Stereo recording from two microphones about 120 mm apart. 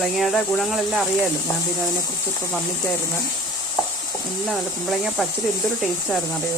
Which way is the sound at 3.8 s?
30° left (ahead or behind).